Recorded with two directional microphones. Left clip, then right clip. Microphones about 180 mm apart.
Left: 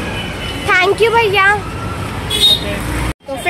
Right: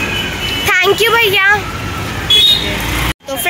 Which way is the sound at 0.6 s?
Centre (ahead or behind).